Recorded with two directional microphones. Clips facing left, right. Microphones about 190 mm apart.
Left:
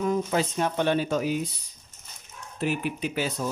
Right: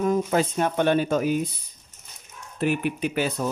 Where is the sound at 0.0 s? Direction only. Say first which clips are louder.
Right 3 dB; 50° right (ahead or behind).